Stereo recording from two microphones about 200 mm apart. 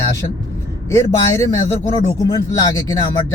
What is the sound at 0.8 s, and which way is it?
Music, 15° left (ahead or behind).